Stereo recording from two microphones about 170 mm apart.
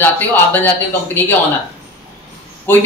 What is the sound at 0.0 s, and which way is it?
A man's voice, 10° left (ahead or behind).